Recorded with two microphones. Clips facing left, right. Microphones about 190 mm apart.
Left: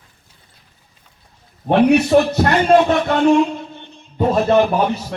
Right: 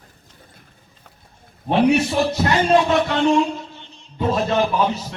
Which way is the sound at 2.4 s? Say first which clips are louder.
Left 4 dB; 55° left (ahead or behind).